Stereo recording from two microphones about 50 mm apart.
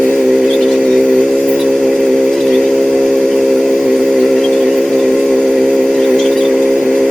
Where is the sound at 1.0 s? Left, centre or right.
Centre.